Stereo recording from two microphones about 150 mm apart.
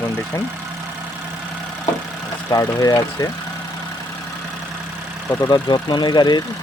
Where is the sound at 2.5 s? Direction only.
25° left (ahead or behind).